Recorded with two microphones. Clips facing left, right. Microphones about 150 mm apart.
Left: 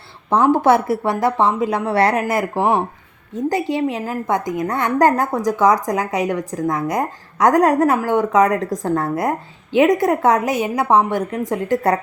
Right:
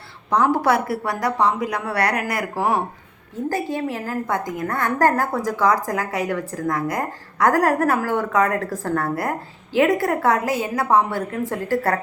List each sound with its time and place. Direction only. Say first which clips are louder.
0.3 s a woman's voice: left 4 dB; 25° left (ahead or behind)